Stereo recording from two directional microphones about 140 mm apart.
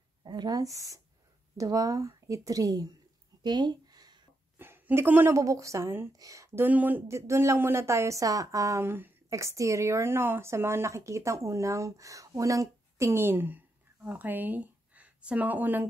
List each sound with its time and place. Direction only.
0.2 s speech: 30° right (ahead or behind)
3.4 s a sound: 30° right (ahead or behind)
4.6 s speech: 15° right (ahead or behind)